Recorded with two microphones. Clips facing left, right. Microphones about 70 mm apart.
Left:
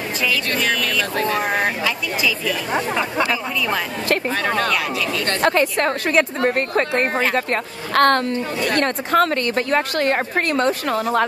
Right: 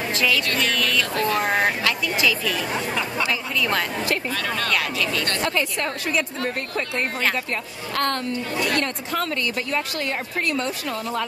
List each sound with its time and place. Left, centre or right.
0.6 s speech: centre
1.1 s speech: left
1.5 s speech: centre
2.7 s speech: left
4.4 s speech: left
4.6 s speech: centre
5.4 s a woman's voice: left